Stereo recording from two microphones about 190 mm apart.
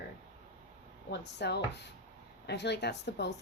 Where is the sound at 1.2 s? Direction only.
60° left (ahead or behind).